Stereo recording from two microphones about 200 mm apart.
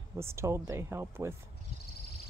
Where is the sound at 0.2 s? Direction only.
15° right (ahead or behind).